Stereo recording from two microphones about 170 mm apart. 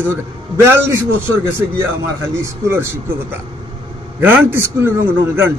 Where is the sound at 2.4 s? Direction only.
15° right (ahead or behind).